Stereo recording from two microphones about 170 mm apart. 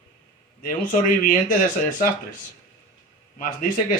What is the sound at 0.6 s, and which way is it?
Speech, 55° left (ahead or behind).